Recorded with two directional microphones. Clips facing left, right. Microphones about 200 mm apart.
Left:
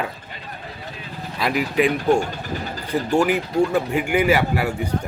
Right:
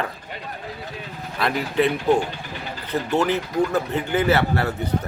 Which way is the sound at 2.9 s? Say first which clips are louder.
Left 2 dB; 10° left (ahead or behind).